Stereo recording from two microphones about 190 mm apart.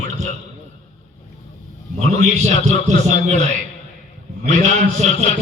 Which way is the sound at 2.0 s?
35° right (ahead or behind).